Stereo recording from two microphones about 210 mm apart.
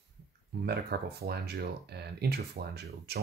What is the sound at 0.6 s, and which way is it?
Speech, 50° right (ahead or behind).